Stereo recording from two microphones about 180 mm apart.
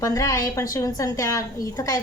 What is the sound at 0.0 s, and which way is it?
A woman's voice, 20° left (ahead or behind).